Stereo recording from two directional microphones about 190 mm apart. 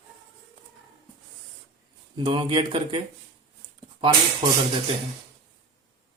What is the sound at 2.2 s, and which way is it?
Speech, 25° right (ahead or behind).